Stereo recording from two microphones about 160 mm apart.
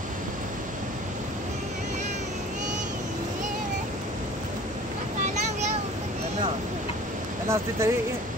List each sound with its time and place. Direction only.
7.4 s speech: 15° right (ahead or behind)